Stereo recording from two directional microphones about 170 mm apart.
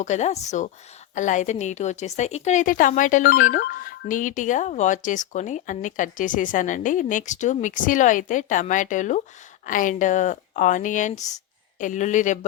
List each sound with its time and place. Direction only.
0.0 s speech: 45° left (ahead or behind)